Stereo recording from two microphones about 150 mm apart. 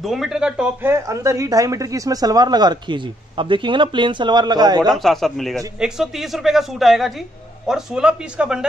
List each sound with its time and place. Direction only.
0.0 s speech: centre (ahead or behind)
0.9 s speech: 20° right (ahead or behind)
4.9 s speech: centre (ahead or behind)